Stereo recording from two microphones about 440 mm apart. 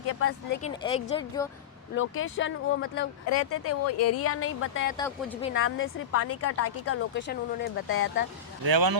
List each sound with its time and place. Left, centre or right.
0.1 s a woman's voice: left
0.6 s speech: centre
2.0 s a woman's voice: left
4.9 s speech: centre
5.5 s a woman's voice: left
8.7 s speech: right